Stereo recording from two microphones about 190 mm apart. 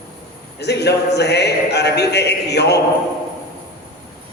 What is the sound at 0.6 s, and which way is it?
A man's voice, 60° left (ahead or behind).